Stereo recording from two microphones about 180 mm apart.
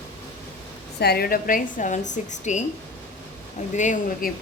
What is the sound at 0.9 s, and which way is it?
A woman's voice, 60° left (ahead or behind).